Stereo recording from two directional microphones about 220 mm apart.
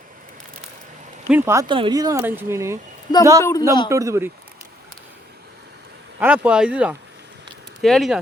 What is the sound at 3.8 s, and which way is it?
Speech, 15° right (ahead or behind).